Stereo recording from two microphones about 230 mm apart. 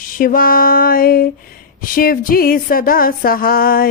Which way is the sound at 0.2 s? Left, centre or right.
Left.